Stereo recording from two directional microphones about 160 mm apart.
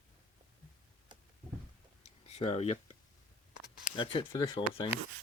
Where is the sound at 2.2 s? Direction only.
40° left (ahead or behind).